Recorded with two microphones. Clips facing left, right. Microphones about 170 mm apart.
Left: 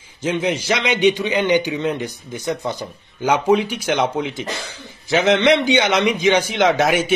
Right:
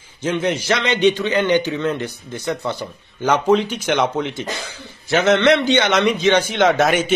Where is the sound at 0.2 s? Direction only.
15° left (ahead or behind).